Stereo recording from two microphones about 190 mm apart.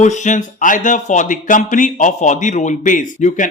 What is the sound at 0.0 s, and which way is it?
A man's voice, 40° left (ahead or behind).